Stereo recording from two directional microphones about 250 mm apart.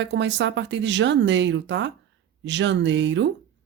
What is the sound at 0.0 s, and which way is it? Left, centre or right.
A woman's voice, right.